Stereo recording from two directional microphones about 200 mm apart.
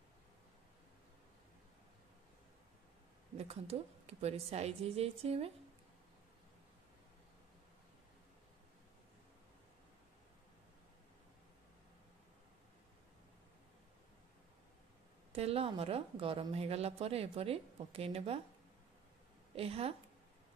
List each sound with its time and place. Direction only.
3.3 s a woman's voice: 30° right (ahead or behind)
15.3 s speech: 30° right (ahead or behind)
19.5 s speech: 30° right (ahead or behind)